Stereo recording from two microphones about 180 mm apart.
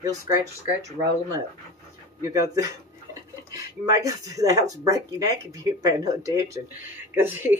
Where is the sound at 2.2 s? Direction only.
20° right (ahead or behind).